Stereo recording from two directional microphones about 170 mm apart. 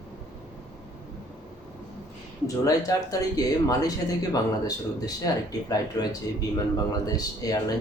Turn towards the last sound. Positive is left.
turn(degrees=20)  # may be behind; listen again after turning